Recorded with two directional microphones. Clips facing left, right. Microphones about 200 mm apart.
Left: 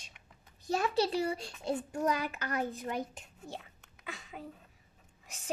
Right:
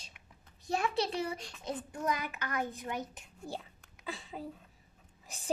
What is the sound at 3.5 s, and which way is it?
Speech, 35° right (ahead or behind).